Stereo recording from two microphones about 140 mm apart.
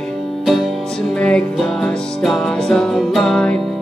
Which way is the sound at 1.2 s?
5° left (ahead or behind).